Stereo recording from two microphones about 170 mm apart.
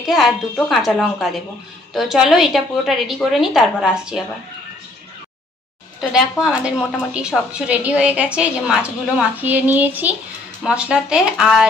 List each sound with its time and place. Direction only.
0.0 s a woman's voice: centre (ahead or behind)
5.9 s a woman's voice: 5° right (ahead or behind)